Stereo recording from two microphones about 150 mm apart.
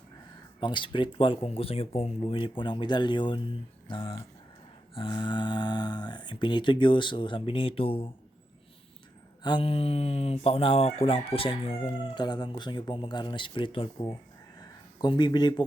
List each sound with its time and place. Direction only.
0.6 s crowing: 30° left (ahead or behind)
9.4 s crowing: 30° left (ahead or behind)
14.6 s a sound: 30° left (ahead or behind)